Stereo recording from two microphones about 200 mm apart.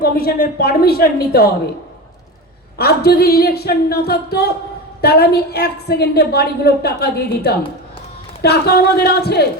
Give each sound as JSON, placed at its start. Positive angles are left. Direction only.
{"t": 0.0, "sound": "a woman's voice", "side_deg": 50}
{"t": 2.7, "sound": "a woman's voice", "side_deg": 50}